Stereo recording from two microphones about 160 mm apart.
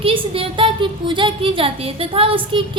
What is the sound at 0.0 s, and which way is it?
A woman's voice, 35° right (ahead or behind).